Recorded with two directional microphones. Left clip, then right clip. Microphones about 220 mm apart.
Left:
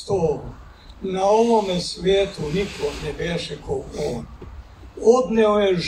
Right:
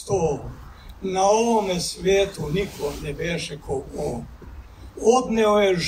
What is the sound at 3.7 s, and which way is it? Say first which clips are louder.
Speech: left 1 dB; 5° right (ahead or behind).